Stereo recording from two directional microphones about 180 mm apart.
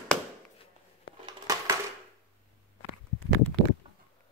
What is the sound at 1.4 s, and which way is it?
Typewriter, 20° right (ahead or behind).